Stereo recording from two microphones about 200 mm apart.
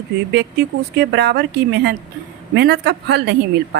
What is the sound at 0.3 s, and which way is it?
A woman's voice, 55° right (ahead or behind).